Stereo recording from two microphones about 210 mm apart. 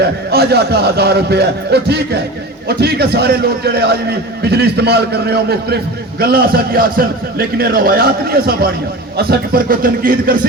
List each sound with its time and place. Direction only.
0.0 s a man's voice: 50° right (ahead or behind)